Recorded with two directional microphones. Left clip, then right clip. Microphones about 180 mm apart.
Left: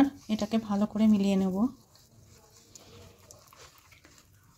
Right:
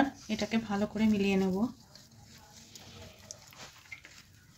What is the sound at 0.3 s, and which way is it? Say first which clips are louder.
Speech: left 2 dB; 35° left (ahead or behind).